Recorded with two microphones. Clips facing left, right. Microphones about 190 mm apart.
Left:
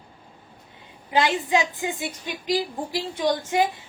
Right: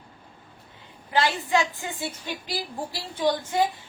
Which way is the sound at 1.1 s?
20° left (ahead or behind).